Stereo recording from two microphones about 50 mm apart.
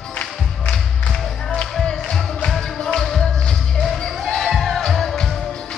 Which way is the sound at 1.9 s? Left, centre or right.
Centre.